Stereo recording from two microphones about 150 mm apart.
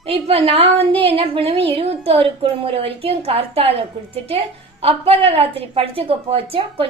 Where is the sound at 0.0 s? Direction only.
40° right (ahead or behind).